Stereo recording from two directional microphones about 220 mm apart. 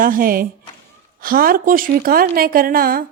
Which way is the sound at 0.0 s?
40° right (ahead or behind).